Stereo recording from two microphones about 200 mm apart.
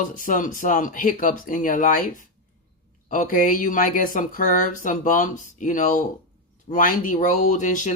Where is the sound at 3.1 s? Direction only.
40° left (ahead or behind).